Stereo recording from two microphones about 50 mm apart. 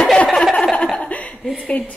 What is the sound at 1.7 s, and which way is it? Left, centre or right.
Speech, left.